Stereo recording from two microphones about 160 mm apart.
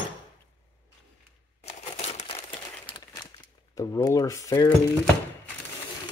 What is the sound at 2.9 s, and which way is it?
Crumpling, 25° left (ahead or behind).